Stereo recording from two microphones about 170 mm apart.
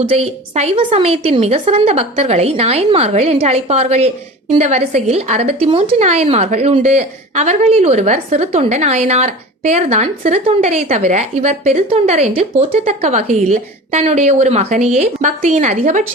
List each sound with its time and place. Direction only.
0.0 s a woman's voice: 35° right (ahead or behind)